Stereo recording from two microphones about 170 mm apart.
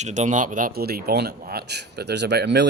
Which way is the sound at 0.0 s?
45° right (ahead or behind).